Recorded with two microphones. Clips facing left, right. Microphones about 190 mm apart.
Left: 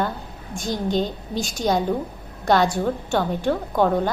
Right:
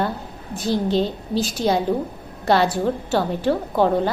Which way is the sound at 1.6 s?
5° right (ahead or behind).